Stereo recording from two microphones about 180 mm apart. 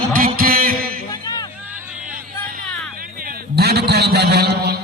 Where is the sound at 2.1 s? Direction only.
50° right (ahead or behind); by 4.8 s 65° right (ahead or behind).